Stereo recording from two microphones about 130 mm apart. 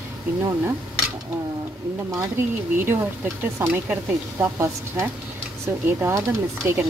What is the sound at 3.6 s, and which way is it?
Speech, 15° right (ahead or behind).